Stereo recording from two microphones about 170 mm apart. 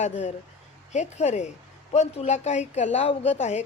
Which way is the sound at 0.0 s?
40° left (ahead or behind).